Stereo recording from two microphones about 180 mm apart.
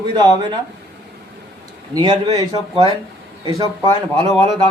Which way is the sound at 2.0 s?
20° right (ahead or behind).